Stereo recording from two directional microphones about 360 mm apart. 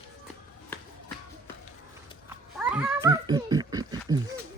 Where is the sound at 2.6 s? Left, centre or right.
Centre.